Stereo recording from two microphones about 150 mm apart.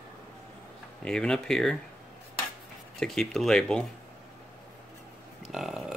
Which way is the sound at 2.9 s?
Centre (ahead or behind).